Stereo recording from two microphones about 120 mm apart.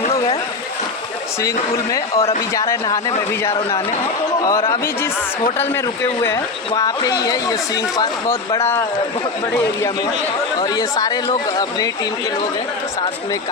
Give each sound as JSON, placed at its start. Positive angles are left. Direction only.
{"t": 1.4, "sound": "speech", "side_deg": 25}
{"t": 6.2, "sound": "speech", "side_deg": 25}
{"t": 10.6, "sound": "speech", "side_deg": 35}